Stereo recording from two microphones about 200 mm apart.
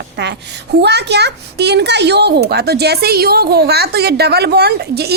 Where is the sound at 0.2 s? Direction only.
55° right (ahead or behind).